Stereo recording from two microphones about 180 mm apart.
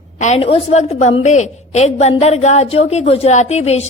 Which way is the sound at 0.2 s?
35° left (ahead or behind).